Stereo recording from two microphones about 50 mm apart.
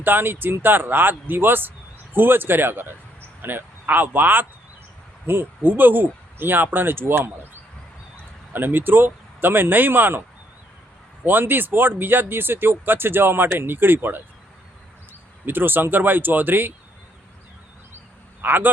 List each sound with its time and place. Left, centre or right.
0.0 s a man's voice: right
11.3 s speech: right
15.4 s speech: right
18.4 s speech: right